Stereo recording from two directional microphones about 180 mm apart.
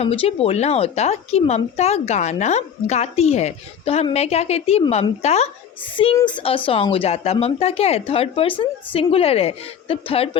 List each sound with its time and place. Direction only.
0.0 s a woman's voice: 35° left (ahead or behind)